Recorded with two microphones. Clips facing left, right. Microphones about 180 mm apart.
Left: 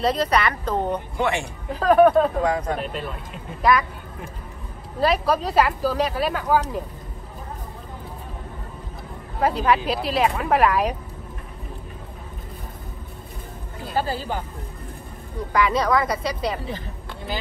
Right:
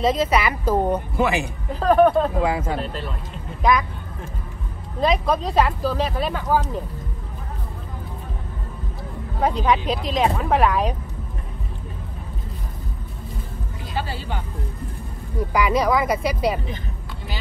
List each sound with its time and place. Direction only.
0.0 s speech: centre (ahead or behind)
5.0 s speech: 5° left (ahead or behind)
9.4 s speech: 5° left (ahead or behind)
13.9 s speech: 40° left (ahead or behind)
15.5 s speech: 5° right (ahead or behind)